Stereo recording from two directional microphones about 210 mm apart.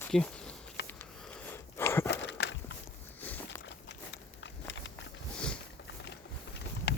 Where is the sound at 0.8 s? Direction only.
10° left (ahead or behind).